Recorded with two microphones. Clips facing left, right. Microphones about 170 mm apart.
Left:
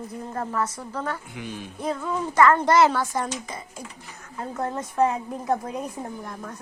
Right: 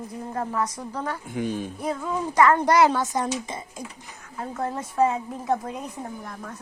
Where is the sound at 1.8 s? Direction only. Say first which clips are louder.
Left 2 dB; 10° right (ahead or behind).